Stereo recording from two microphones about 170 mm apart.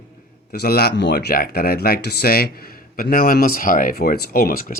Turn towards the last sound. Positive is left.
turn(degrees=65)  # may be behind; listen again after turning